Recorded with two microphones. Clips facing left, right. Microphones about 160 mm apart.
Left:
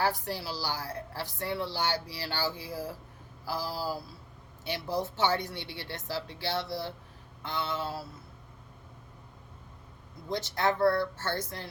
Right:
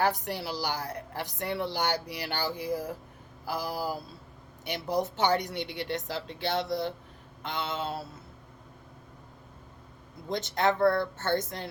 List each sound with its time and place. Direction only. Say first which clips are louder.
0.0 s speech: right 2 dB; 20° right (ahead or behind)
10.2 s speech: right 2 dB; 20° right (ahead or behind)
10.8 s speech: right 1 dB; 50° right (ahead or behind)
11.3 s speech: right 5 dB; 20° right (ahead or behind)